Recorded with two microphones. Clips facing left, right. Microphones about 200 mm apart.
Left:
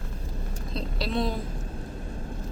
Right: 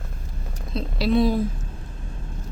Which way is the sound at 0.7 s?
5° right (ahead or behind).